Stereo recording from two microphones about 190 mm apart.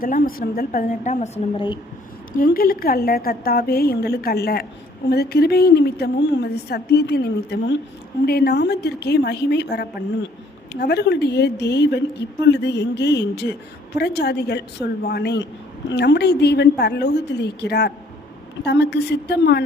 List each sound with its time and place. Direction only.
0.0 s a woman's voice: 50° left (ahead or behind); by 1.8 s 25° left (ahead or behind)
2.4 s a woman's voice: 50° left (ahead or behind)